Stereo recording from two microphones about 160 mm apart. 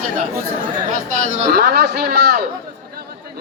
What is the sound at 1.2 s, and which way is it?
A man's voice, 80° right.